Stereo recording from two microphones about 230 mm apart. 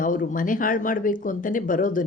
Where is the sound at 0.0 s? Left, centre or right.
Left.